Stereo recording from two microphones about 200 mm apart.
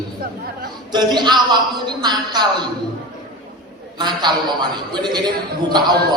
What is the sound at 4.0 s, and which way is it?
Speech, 20° right (ahead or behind).